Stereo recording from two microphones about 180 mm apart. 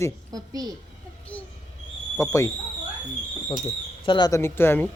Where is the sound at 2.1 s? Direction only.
15° left (ahead or behind).